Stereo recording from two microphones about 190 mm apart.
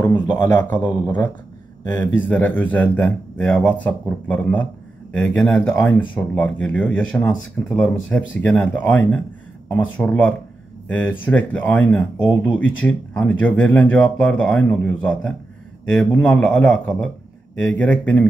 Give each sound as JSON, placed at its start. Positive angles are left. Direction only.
{"t": 0.1, "sound": "a man's voice", "side_deg": 20}
{"t": 2.0, "sound": "speech", "side_deg": 10}